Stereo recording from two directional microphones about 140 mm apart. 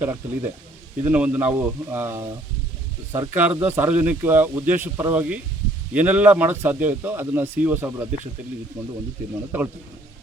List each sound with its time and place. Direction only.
0.0 s a man's voice: 15° right (ahead or behind)